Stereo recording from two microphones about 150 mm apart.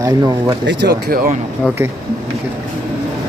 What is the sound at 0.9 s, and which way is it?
Speech, 80° right.